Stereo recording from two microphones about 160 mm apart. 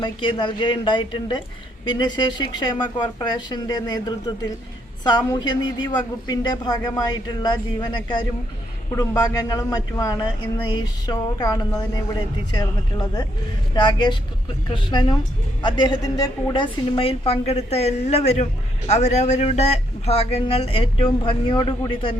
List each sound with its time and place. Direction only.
0.0 s speech: 30° left (ahead or behind)